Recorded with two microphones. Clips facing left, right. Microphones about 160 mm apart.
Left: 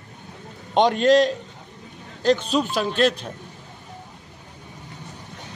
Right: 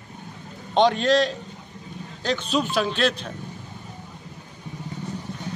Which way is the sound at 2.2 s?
40° left (ahead or behind).